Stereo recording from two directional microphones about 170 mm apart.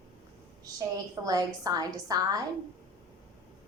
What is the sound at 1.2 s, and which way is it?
A woman's voice, 20° right (ahead or behind).